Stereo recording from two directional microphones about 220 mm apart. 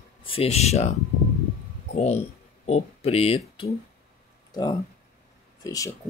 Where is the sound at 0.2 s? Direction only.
25° left (ahead or behind).